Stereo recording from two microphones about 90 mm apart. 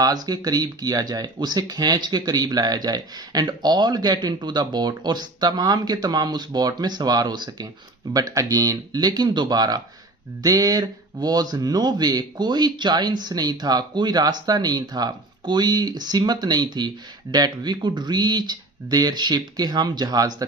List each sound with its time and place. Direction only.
0.0 s speech: 45° right (ahead or behind)